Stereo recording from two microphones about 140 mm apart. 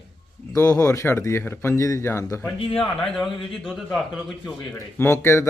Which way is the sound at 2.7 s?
5° left (ahead or behind).